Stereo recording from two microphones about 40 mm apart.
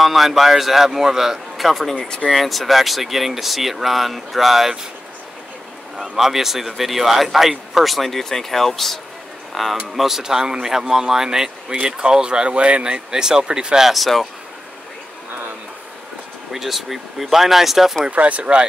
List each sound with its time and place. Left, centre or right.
0.0 s speech: centre
1.7 s speech: centre
2.0 s speech: left
2.3 s speech: centre
6.1 s speech: centre
13.8 s speech: centre
16.5 s speech: centre
18.1 s speech: right
18.4 s speech: right